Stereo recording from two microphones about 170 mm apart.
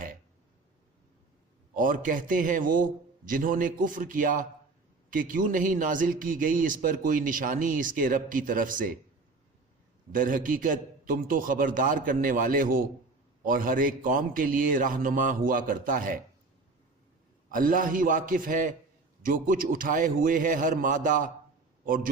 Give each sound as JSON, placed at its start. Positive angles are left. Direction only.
{"t": 1.7, "sound": "a man's voice", "side_deg": -55}
{"t": 10.1, "sound": "a man's voice", "side_deg": -55}
{"t": 17.5, "sound": "a man's voice", "side_deg": -55}